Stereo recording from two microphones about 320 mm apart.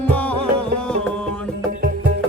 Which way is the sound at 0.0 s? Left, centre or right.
Centre.